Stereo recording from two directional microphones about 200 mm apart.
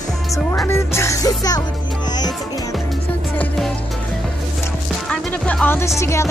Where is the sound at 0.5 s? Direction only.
15° left (ahead or behind).